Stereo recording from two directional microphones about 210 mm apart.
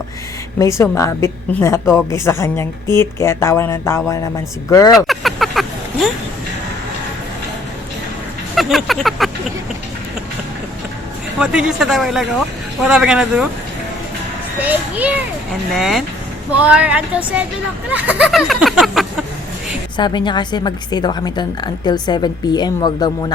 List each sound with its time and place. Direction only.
0.6 s speech: 15° left (ahead or behind)
4.9 s a sound: centre (ahead or behind)
8.5 s a sound: centre (ahead or behind)
11.3 s speech: 5° right (ahead or behind)
14.6 s speech: 5° right (ahead or behind)
20.0 s a woman's voice: 20° left (ahead or behind)